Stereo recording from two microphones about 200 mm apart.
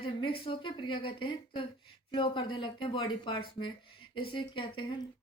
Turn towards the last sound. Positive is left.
turn(degrees=25)  # may be behind; listen again after turning